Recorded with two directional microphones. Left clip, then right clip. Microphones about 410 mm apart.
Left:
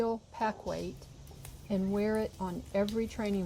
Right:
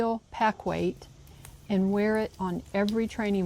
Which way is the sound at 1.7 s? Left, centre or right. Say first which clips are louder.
Right 5 dB; right.